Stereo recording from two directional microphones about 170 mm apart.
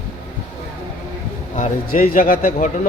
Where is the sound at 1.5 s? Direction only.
50° left (ahead or behind).